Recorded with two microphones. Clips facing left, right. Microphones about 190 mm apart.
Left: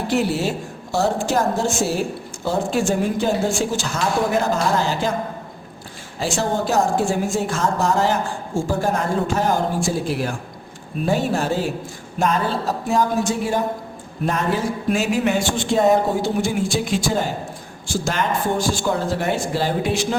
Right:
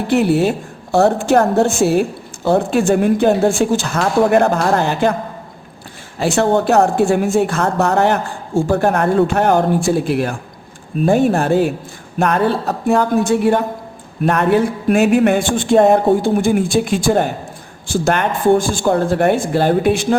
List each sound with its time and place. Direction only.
0.1 s a woman's voice: 60° right (ahead or behind)
6.1 s a woman's voice: 60° right (ahead or behind)